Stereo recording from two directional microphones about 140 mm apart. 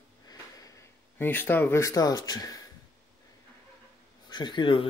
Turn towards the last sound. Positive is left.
turn(degrees=35)  # may be behind; listen again after turning